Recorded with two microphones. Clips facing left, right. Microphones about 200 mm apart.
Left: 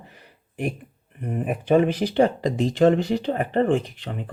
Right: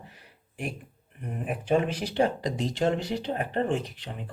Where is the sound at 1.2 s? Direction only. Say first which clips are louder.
Left 6 dB; 55° left (ahead or behind).